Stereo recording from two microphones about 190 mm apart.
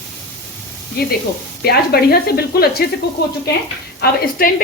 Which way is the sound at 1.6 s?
55° left (ahead or behind).